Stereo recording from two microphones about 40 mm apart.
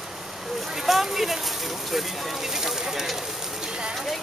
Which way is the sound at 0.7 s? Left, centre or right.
Centre.